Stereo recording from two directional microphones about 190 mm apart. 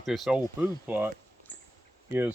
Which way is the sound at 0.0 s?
Centre (ahead or behind).